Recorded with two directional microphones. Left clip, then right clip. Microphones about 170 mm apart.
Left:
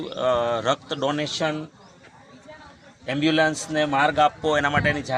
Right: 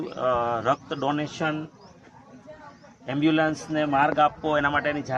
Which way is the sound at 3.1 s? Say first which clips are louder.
Left 2 dB; 30° left (ahead or behind).